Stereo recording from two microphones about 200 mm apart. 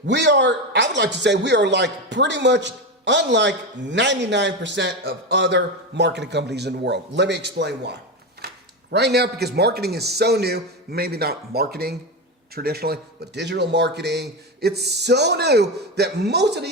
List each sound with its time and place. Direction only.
0.1 s a man's voice: 60° right (ahead or behind)